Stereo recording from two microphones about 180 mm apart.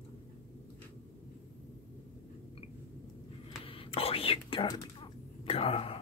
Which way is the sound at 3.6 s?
30° left (ahead or behind).